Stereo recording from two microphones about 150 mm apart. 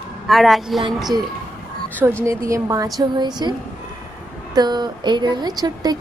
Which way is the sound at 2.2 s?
20° right (ahead or behind).